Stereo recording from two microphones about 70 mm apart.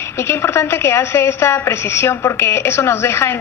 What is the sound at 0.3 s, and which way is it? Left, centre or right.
A woman's voice, left.